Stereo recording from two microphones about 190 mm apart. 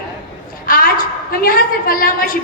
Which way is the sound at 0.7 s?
45° left (ahead or behind).